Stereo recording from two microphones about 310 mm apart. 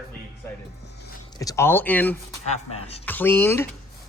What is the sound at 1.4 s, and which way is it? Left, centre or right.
Speech, centre.